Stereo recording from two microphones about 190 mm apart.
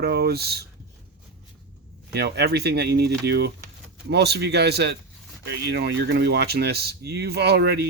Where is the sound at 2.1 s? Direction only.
60° right (ahead or behind).